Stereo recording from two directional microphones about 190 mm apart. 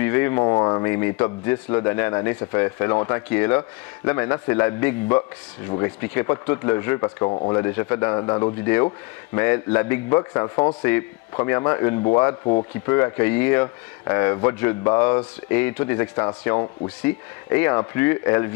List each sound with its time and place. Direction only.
0.0 s speech: 15° left (ahead or behind)